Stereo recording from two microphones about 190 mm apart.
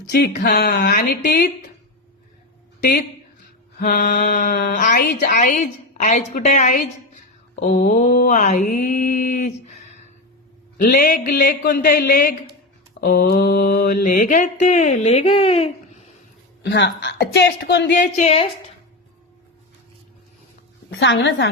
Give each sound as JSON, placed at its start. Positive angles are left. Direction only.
{"t": 0.1, "sound": "speech", "side_deg": 55}
{"t": 3.8, "sound": "speech", "side_deg": 45}
{"t": 7.6, "sound": "mantra", "side_deg": 45}
{"t": 10.8, "sound": "speech", "side_deg": 60}
{"t": 11.2, "sound": "mantra", "side_deg": 55}
{"t": 13.0, "sound": "speech", "side_deg": 55}
{"t": 16.6, "sound": "speech", "side_deg": 70}
{"t": 18.0, "sound": "speech", "side_deg": 35}
{"t": 20.9, "sound": "a woman's voice", "side_deg": 80}